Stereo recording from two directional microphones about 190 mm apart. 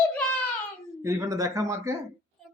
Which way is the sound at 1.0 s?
15° right (ahead or behind).